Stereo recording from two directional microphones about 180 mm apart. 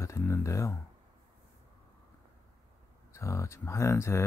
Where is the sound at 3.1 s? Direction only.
15° left (ahead or behind).